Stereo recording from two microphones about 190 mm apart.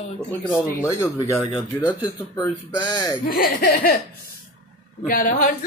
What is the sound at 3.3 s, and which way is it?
Speech, 50° left (ahead or behind).